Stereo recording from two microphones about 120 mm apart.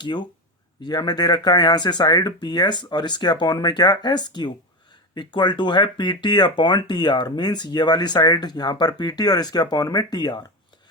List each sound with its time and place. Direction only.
0.0 s speech: 40° left (ahead or behind)